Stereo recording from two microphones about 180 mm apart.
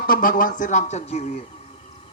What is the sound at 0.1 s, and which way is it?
Speech, 50° left (ahead or behind).